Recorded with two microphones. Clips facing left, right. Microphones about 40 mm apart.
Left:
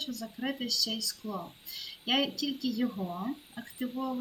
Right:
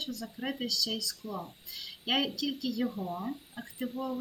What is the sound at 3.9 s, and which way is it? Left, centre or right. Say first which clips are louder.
Speech: left 1 dB; left.